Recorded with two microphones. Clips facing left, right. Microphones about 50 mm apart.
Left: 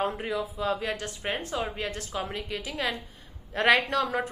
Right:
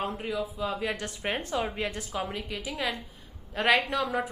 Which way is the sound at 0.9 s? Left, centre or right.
Right.